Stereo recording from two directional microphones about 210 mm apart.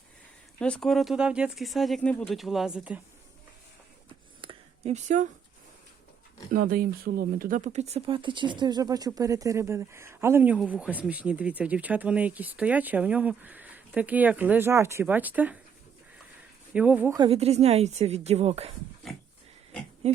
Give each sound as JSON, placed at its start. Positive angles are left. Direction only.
{"t": 0.6, "sound": "speech", "side_deg": 5}
{"t": 4.4, "sound": "a sound", "side_deg": -25}
{"t": 6.5, "sound": "speech", "side_deg": -45}
{"t": 16.7, "sound": "speech", "side_deg": -5}
{"t": 17.2, "sound": "speech", "side_deg": -25}
{"t": 20.0, "sound": "a sound", "side_deg": -30}